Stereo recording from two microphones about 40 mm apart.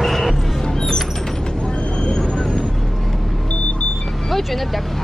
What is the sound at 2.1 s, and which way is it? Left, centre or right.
Vehicle, left.